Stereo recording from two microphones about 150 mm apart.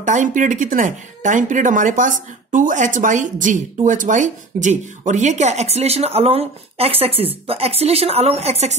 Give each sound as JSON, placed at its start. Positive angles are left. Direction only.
{"t": 0.0, "sound": "a woman's voice", "side_deg": -60}